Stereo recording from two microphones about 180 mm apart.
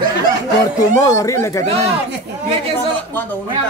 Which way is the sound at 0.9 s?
20° left (ahead or behind).